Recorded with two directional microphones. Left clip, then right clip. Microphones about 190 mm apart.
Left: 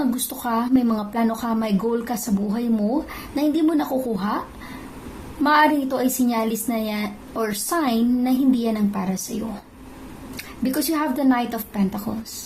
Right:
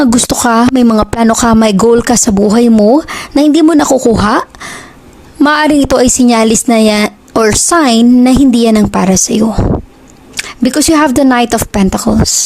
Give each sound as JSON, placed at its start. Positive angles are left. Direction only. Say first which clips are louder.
{"t": 0.0, "sound": "a woman's voice", "louder": "right 16 dB", "side_deg": -55}
{"t": 10.3, "sound": "a woman's voice", "louder": "right 13 dB", "side_deg": -60}